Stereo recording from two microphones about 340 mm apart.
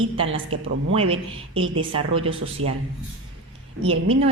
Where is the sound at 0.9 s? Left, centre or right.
Centre.